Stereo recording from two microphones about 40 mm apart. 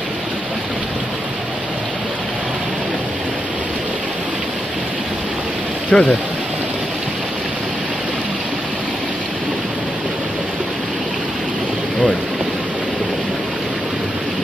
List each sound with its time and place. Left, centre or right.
5.9 s speech: left